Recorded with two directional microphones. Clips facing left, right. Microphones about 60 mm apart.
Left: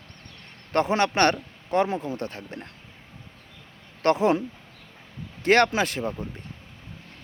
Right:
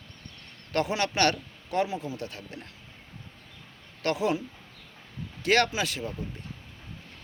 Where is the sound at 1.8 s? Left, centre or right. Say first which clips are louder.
Left 5 dB; left.